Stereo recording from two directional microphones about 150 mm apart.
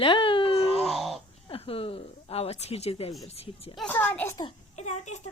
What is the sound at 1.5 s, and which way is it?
Speech, 40° left (ahead or behind).